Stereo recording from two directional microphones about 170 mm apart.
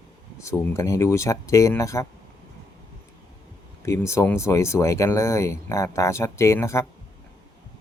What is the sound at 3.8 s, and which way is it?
Speech, 15° left (ahead or behind).